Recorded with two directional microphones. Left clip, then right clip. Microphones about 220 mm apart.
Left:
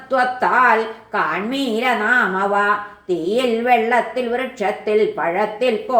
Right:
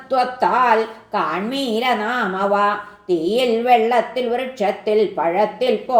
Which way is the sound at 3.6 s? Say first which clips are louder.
Right 1 dB; 30° right (ahead or behind).